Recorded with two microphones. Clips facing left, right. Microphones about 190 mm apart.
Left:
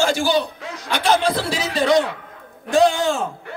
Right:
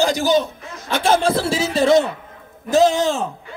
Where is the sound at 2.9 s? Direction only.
Centre (ahead or behind).